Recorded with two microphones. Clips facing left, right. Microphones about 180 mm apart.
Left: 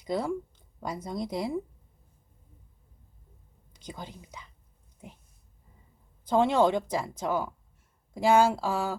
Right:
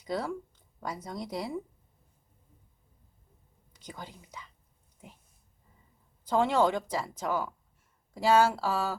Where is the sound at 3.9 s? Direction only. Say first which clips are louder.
Left 3 dB; 15° left (ahead or behind).